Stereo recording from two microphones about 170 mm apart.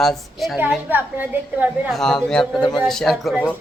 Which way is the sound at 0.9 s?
10° right (ahead or behind).